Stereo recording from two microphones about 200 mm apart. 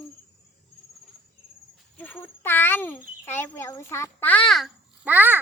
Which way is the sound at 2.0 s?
10° left (ahead or behind).